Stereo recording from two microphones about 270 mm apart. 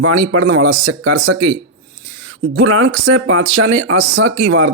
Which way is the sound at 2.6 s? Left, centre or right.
Right.